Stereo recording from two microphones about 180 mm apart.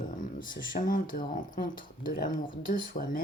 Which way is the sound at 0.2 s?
50° left (ahead or behind).